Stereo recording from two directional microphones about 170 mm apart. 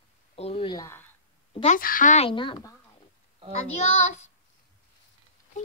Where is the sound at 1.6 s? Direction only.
50° left (ahead or behind).